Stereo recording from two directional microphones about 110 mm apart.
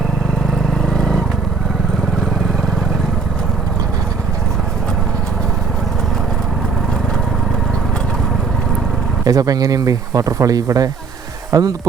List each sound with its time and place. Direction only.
0.9 s vehicle: 5° left (ahead or behind)
9.2 s speech: 35° right (ahead or behind)